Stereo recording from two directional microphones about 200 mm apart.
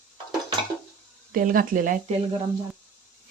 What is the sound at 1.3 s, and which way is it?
Speech, 45° right (ahead or behind).